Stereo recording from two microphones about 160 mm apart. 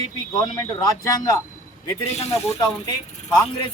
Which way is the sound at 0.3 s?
25° left (ahead or behind).